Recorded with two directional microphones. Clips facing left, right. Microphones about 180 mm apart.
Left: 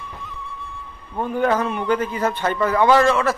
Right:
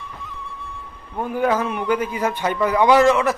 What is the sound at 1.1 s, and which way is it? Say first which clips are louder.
A man's voice: even; 10° right (ahead or behind).